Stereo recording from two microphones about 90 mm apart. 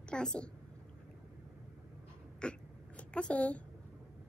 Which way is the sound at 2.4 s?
10° left (ahead or behind).